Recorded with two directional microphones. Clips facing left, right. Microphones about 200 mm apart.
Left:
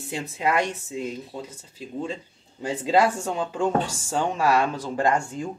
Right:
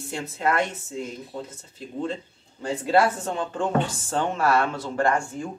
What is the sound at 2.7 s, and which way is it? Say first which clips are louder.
Speech: even; 15° left (ahead or behind).